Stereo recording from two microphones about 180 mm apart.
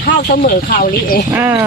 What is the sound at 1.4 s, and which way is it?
Speech, 10° right (ahead or behind).